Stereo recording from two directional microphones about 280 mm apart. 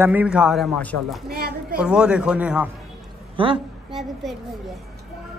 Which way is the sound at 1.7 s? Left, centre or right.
Centre.